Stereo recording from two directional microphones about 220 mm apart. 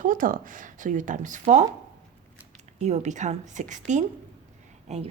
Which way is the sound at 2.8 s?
30° right (ahead or behind).